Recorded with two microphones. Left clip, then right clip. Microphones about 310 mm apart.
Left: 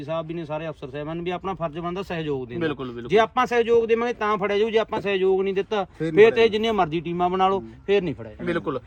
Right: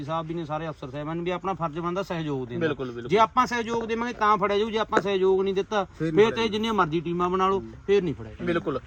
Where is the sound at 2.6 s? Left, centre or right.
Left.